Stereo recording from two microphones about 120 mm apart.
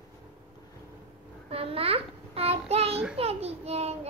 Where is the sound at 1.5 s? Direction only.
55° right (ahead or behind).